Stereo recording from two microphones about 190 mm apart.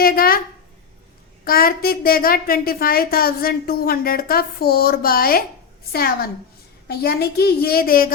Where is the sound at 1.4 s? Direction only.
50° left (ahead or behind).